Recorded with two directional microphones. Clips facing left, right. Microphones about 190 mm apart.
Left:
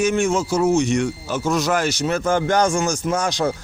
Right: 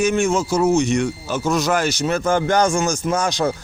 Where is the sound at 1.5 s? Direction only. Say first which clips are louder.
Right 1 dB; 45° right (ahead or behind).